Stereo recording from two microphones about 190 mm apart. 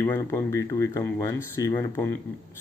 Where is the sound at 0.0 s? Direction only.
15° left (ahead or behind).